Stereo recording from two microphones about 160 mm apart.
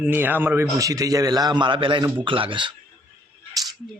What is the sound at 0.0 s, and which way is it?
A man's voice, 10° right (ahead or behind).